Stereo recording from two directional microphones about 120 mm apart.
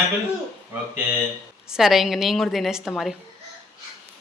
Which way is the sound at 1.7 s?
Centre (ahead or behind).